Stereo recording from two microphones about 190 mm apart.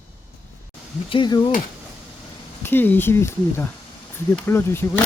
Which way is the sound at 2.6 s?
10° left (ahead or behind).